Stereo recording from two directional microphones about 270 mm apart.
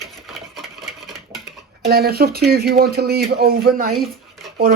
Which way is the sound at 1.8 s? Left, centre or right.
Right.